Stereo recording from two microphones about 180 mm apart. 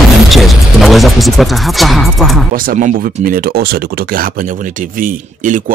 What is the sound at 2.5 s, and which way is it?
Speech, 50° right (ahead or behind).